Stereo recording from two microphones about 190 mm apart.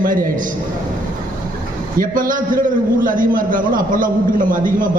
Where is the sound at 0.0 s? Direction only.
45° right (ahead or behind).